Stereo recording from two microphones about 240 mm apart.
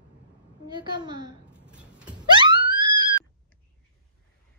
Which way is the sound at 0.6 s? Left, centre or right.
Centre.